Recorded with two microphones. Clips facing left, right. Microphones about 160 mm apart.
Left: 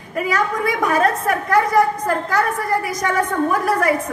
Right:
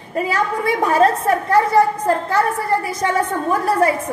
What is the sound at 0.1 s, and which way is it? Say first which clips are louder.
A woman's voice: right 1 dB; 30° right (ahead or behind).